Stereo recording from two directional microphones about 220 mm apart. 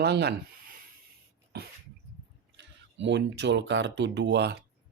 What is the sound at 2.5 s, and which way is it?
Speech, 55° right (ahead or behind).